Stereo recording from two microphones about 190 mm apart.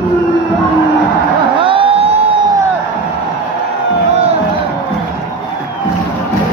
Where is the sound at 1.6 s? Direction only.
30° right (ahead or behind).